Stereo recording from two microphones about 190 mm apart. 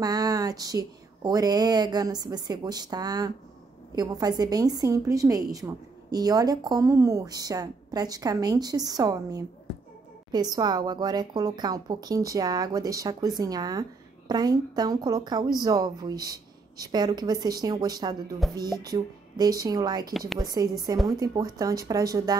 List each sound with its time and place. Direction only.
0.0 s a woman's voice: 20° right (ahead or behind)
20.1 s a woman's voice: centre (ahead or behind)
20.3 s a woman's voice: 20° right (ahead or behind)